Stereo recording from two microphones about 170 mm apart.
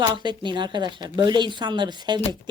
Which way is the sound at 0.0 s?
25° right (ahead or behind).